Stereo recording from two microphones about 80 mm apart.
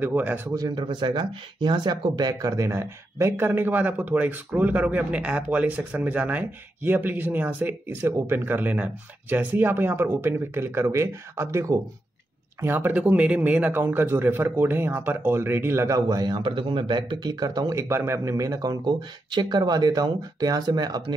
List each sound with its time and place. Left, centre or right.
0.0 s speech: right
0.6 s speech: right
12.5 s speech: right
16.1 s speech: right
16.4 s speech: right
17.8 s speech: right
18.7 s speech: right